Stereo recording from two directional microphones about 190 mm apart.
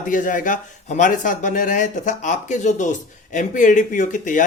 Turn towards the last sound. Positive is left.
turn(degrees=40)  # may be behind; listen again after turning